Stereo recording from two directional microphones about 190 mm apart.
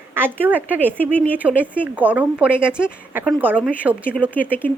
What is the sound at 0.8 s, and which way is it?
Speech, 10° left (ahead or behind).